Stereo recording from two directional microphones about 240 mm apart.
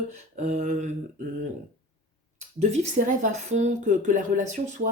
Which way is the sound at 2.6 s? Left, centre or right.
Right.